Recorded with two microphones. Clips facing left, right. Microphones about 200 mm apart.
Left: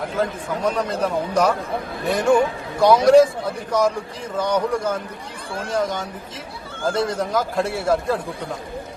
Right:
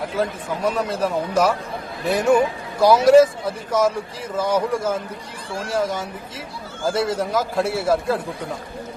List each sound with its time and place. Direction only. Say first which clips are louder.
0.2 s a man's voice: even; 5° right (ahead or behind)